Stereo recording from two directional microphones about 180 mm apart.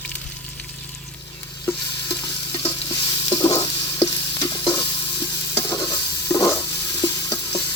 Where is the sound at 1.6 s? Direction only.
15° left (ahead or behind).